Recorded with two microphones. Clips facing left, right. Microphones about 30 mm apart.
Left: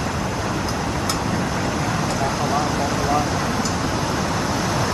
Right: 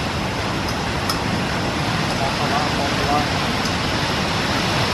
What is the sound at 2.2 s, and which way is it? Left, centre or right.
Vehicle, right.